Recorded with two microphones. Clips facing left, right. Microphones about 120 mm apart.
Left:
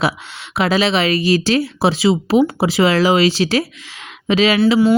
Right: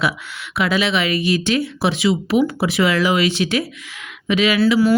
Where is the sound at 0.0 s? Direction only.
30° left (ahead or behind).